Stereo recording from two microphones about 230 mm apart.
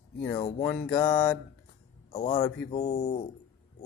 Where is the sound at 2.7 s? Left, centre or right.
Left.